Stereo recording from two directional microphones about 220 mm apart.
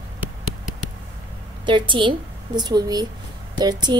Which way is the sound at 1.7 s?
20° right (ahead or behind).